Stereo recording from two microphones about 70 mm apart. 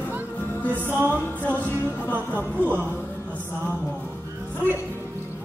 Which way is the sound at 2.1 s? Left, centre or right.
Right.